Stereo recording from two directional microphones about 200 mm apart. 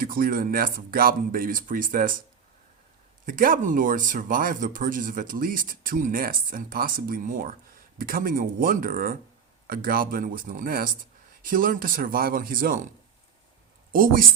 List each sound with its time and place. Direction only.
0.0 s speech: 45° right (ahead or behind)
3.2 s speech: 45° right (ahead or behind)
13.9 s speech: 45° right (ahead or behind)